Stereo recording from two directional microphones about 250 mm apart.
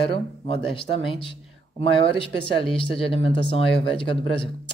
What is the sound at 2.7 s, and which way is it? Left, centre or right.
Speech, left.